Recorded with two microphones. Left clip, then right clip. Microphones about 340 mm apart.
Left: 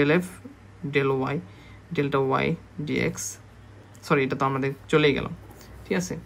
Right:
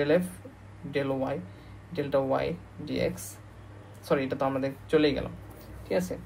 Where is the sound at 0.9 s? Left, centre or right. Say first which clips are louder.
Left 5 dB; left.